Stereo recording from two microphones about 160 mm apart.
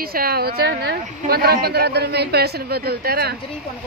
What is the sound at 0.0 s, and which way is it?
A woman's voice, 70° right (ahead or behind).